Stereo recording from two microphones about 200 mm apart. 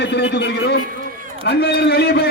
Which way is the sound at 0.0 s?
60° left (ahead or behind).